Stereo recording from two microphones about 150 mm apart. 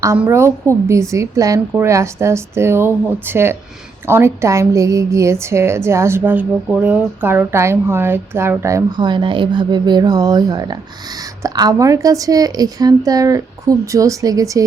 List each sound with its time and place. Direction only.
0.2 s a woman's voice: 15° right (ahead or behind)